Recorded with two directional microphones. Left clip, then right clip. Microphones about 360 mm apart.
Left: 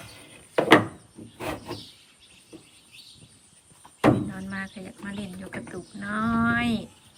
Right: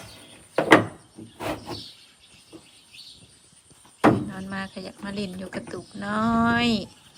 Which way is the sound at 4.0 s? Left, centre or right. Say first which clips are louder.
Right 2 dB; centre.